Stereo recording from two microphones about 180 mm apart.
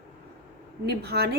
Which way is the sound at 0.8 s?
65° right (ahead or behind).